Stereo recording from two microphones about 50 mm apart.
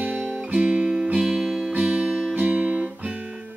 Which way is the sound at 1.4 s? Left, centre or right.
Centre.